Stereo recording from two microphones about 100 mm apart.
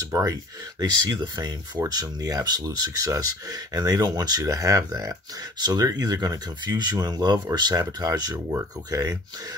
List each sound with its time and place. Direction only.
0.0 s speech: 35° right (ahead or behind)